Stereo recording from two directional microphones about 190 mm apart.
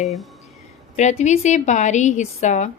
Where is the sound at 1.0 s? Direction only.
40° left (ahead or behind).